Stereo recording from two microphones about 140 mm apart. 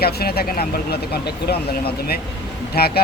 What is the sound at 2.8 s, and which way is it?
Speech, 90° left.